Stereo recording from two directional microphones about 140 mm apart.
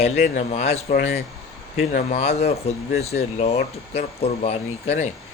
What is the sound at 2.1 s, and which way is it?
Speech, 50° left (ahead or behind).